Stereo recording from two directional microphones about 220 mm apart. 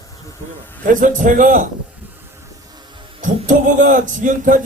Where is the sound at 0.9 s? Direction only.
35° right (ahead or behind).